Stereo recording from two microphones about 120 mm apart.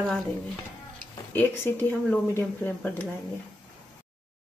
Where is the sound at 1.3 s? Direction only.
15° left (ahead or behind).